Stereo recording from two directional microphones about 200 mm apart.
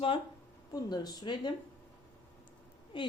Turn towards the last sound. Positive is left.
turn(degrees=25)  # may be behind; listen again after turning